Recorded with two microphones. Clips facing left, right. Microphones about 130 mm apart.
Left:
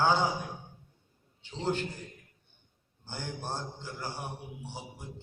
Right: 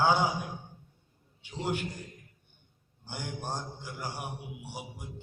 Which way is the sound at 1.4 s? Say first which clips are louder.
Left 1 dB; 10° right (ahead or behind).